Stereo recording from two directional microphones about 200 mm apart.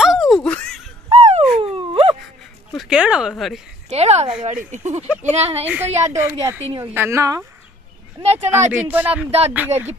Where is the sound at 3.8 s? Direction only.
35° right (ahead or behind).